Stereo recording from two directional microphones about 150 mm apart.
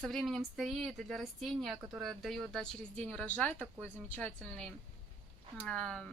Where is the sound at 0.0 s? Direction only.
Centre (ahead or behind).